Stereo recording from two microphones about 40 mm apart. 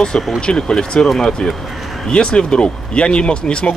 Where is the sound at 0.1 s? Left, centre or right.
Left.